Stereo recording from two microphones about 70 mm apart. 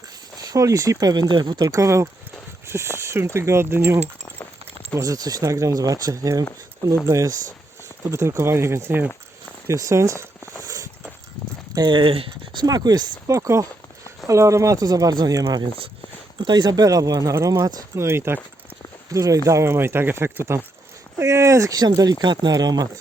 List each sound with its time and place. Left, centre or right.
0.3 s speech: right
1.6 s speech: right
4.9 s speech: right
7.0 s speech: right
11.7 s speech: right
12.5 s speech: right
13.2 s speech: right
16.4 s speech: right
17.9 s speech: right
19.1 s speech: right
19.5 s speech: right
21.2 s speech: right
21.8 s speech: right